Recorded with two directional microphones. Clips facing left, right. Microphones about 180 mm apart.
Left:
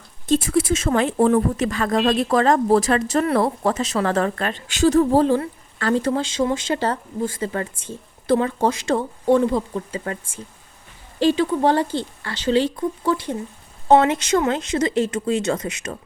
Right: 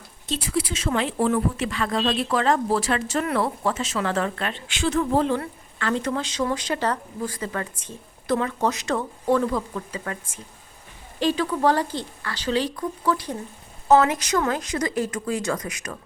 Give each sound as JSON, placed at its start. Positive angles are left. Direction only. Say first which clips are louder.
{"t": 0.3, "sound": "speech", "louder": "left 8 dB", "side_deg": 45}